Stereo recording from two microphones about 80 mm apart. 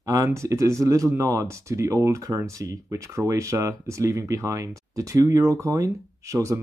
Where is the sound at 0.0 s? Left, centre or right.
Right.